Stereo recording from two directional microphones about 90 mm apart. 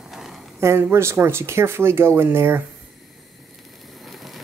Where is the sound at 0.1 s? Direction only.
5° right (ahead or behind).